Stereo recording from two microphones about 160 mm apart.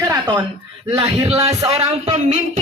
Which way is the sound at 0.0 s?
25° right (ahead or behind).